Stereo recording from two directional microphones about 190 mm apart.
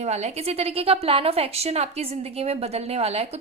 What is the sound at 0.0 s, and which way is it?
A woman's voice, 35° right (ahead or behind).